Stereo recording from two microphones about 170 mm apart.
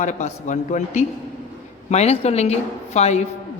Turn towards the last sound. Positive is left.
turn(degrees=40)  # may be behind; listen again after turning